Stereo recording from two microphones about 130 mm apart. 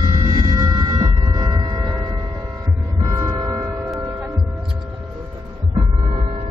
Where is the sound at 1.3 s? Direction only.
35° right (ahead or behind).